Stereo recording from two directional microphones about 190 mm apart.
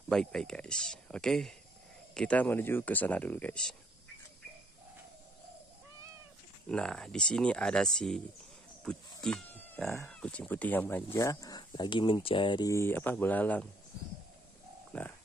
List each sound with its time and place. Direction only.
0.1 s speech: 5° left (ahead or behind)
6.7 s speech: 5° left (ahead or behind)
14.9 s bird: 5° left (ahead or behind)